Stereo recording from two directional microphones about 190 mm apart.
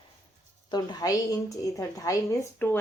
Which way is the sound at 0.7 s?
20° left (ahead or behind).